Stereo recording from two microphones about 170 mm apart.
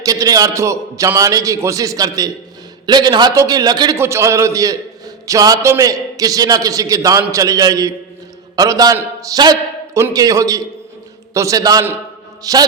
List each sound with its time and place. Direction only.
0.0 s a man's voice: 20° right (ahead or behind)